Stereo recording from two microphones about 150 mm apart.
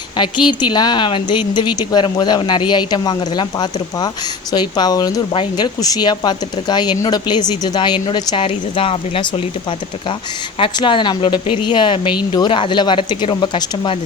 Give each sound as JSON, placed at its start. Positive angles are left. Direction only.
{"t": 0.2, "sound": "a woman's voice", "side_deg": 30}
{"t": 10.6, "sound": "speech", "side_deg": 35}